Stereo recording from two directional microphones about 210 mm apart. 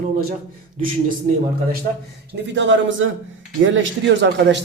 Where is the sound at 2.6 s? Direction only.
60° right (ahead or behind).